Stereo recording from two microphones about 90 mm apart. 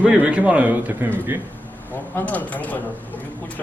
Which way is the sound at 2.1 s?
20° left (ahead or behind).